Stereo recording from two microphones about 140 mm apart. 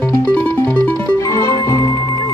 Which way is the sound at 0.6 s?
15° left (ahead or behind).